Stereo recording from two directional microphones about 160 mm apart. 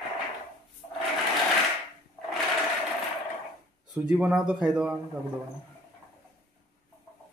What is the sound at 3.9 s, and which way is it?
Speech, 5° right (ahead or behind).